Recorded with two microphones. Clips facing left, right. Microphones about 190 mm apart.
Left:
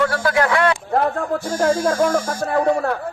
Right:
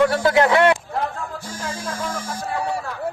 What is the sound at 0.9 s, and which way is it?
Speech, 55° left (ahead or behind).